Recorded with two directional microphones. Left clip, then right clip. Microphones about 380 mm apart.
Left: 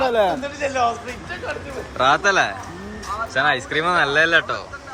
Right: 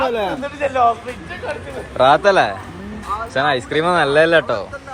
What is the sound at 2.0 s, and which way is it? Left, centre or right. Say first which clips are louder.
Speech: right 4 dB; centre.